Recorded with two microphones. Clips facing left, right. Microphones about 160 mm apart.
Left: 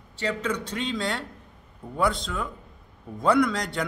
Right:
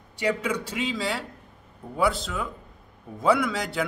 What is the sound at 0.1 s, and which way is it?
A man's voice, 10° right (ahead or behind).